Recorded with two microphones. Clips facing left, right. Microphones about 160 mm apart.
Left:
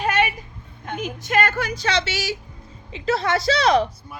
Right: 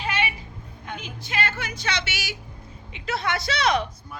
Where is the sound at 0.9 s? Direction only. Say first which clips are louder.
Left 8 dB; 45° left (ahead or behind).